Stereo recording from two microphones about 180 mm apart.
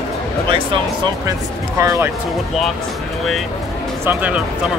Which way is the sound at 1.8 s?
15° right (ahead or behind).